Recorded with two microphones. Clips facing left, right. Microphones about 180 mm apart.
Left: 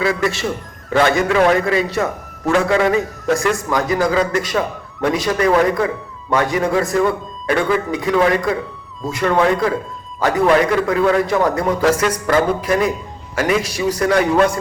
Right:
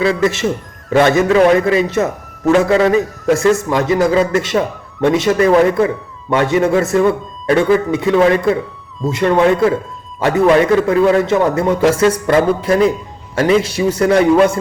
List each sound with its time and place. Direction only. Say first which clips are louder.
0.0 s a man's voice: right 4 dB; 25° right (ahead or behind)